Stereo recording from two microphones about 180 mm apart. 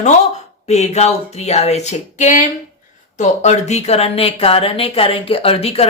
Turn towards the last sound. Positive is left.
turn(degrees=35)  # may be behind; listen again after turning